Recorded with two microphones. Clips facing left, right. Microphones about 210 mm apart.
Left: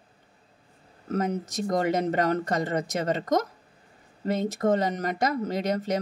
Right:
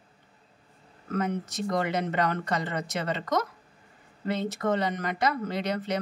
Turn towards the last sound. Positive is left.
turn(degrees=45)  # may be behind; listen again after turning